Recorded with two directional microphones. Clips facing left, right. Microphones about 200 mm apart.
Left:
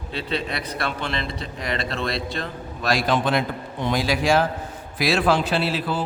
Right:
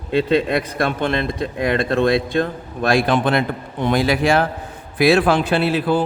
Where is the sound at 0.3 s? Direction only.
50° right (ahead or behind).